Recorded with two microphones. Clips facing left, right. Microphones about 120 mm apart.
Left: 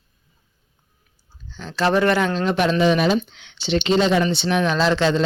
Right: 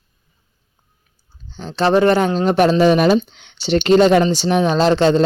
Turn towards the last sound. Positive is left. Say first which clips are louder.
# right 5 dB
turn(degrees=-40)  # may be behind; listen again after turning